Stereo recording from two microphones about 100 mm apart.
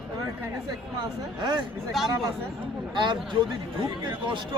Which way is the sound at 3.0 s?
50° right (ahead or behind).